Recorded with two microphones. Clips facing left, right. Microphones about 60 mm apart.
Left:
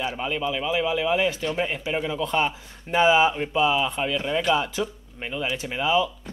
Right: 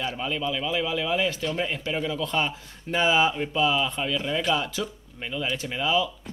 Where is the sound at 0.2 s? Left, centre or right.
Left.